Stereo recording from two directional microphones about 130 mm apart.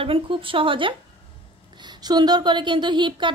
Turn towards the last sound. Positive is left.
turn(degrees=-35)  # may be behind; listen again after turning